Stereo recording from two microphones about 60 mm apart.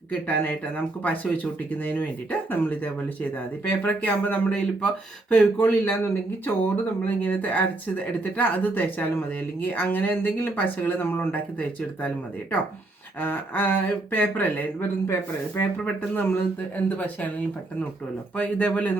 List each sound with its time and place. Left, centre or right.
0.1 s speech: left
13.1 s speech: left
18.3 s speech: left